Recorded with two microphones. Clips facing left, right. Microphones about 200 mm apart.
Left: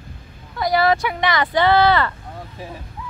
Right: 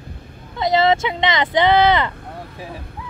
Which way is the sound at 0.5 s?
20° right (ahead or behind).